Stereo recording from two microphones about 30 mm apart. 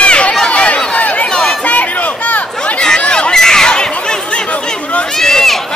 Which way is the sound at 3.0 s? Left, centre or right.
Left.